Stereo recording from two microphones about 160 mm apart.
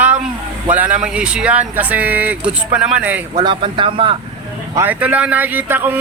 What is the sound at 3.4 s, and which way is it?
Speech, 30° right (ahead or behind).